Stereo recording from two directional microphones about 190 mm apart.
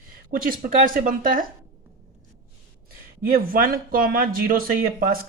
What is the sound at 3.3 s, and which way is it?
Speech, 50° right (ahead or behind).